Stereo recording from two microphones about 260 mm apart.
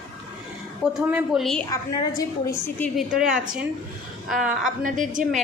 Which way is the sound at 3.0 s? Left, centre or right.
Centre.